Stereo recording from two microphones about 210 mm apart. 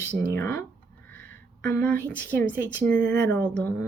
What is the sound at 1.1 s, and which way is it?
Music, 10° left (ahead or behind).